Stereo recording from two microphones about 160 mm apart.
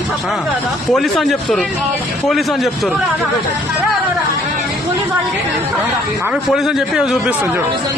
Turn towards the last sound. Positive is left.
turn(degrees=-5)  # may be behind; listen again after turning